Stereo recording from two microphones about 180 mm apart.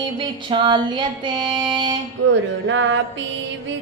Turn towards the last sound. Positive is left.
turn(degrees=-90)